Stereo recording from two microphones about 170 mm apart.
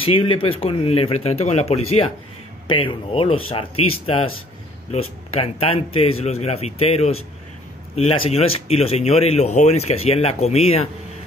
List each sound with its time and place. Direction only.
0.0 s speech: 30° left (ahead or behind)